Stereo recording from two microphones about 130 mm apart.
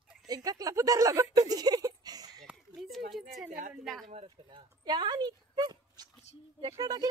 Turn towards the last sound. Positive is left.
turn(degrees=-30)  # may be behind; listen again after turning